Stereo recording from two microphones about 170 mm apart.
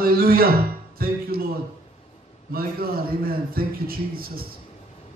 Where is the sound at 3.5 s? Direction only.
60° right (ahead or behind).